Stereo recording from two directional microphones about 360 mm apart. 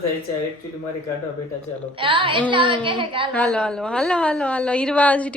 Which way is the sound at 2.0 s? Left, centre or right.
Centre.